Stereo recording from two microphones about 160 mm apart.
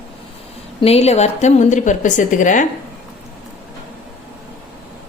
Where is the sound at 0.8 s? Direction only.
40° left (ahead or behind).